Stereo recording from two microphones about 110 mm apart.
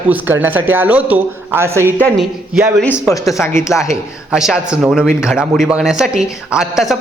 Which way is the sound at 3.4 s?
25° left (ahead or behind).